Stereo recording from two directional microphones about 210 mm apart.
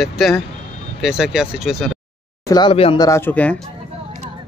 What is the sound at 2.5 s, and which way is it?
Speech, 20° left (ahead or behind).